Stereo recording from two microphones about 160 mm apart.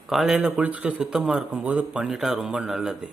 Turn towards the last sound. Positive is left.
turn(degrees=-5)  # may be behind; listen again after turning